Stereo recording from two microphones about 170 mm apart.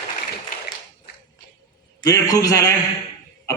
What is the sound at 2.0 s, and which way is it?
Speech, 20° left (ahead or behind).